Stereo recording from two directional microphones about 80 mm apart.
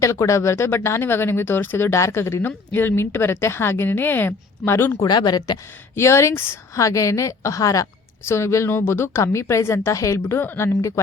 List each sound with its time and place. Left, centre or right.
0.0 s a woman's voice: left
5.0 s speech: left
5.9 s a woman's voice: left